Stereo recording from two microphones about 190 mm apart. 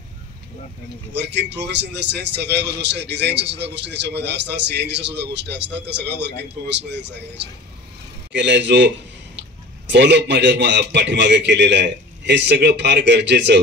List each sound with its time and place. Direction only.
1.1 s a man's voice: 65° right (ahead or behind)